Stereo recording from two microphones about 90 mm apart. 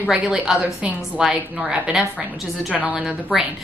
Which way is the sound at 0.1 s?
5° right (ahead or behind).